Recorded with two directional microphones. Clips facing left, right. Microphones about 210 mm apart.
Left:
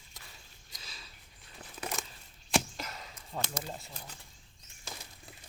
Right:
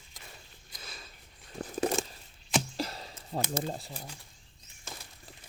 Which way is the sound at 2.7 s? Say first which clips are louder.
Right 8 dB; 35° right (ahead or behind).